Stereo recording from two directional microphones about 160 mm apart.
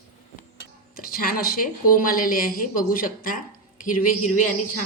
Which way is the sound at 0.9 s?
65° left (ahead or behind).